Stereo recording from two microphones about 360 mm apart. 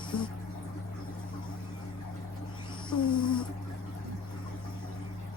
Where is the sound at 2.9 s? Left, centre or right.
Centre.